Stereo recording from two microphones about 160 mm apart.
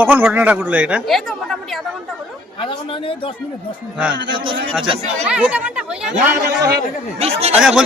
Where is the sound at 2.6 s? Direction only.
35° left (ahead or behind).